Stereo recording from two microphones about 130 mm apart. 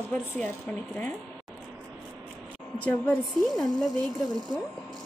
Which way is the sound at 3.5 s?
Centre (ahead or behind).